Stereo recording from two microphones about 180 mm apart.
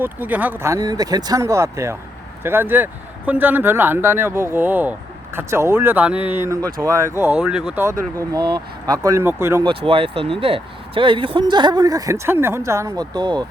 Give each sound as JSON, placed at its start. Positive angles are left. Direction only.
{"t": 0.0, "sound": "speech", "side_deg": -10}
{"t": 9.6, "sound": "speech", "side_deg": -30}